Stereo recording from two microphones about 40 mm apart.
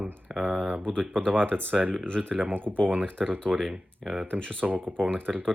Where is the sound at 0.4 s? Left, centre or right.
Right.